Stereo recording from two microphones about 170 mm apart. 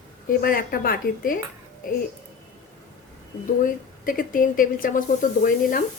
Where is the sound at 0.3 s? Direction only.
60° left (ahead or behind).